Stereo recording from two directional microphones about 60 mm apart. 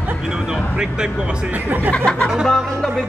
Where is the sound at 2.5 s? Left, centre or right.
Centre.